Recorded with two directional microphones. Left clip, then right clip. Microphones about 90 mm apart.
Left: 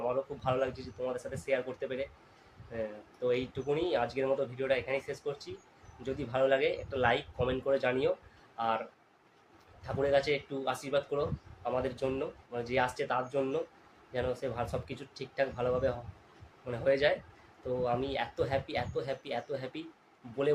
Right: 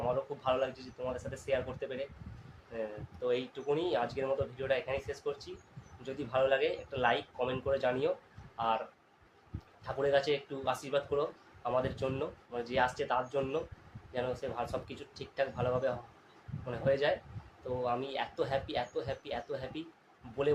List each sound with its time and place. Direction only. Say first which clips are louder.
0.1 s speech: even; 15° left (ahead or behind)
9.8 s speech: left 1 dB; 15° left (ahead or behind)